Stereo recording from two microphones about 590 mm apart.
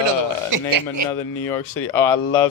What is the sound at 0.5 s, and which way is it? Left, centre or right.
Speech, right.